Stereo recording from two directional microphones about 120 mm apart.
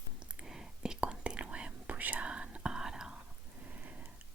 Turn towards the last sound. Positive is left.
turn(degrees=-10)  # may be behind; listen again after turning